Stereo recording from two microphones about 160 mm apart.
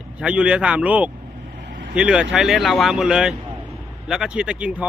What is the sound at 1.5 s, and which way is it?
Vehicle, 75° right (ahead or behind).